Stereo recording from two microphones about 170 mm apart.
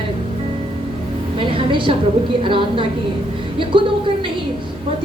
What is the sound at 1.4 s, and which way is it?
A woman's voice, 30° right (ahead or behind).